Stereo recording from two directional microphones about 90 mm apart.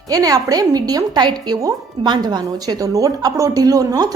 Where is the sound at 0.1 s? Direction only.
40° right (ahead or behind).